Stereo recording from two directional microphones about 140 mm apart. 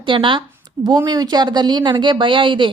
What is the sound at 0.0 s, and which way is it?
A woman's voice, 35° right (ahead or behind).